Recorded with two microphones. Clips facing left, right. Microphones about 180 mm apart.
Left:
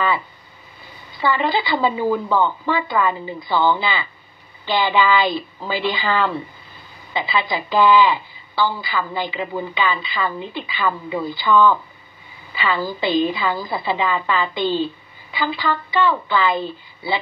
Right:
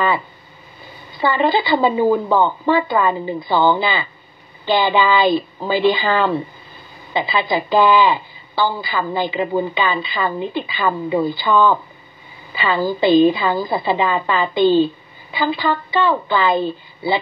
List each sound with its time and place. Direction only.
1.2 s a woman's voice: 30° right (ahead or behind)